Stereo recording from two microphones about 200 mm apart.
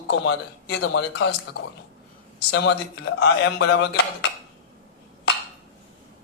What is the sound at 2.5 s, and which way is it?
Speech, 60° left (ahead or behind).